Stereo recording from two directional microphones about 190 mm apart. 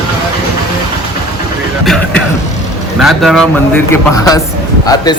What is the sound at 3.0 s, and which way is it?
Speech, centre (ahead or behind).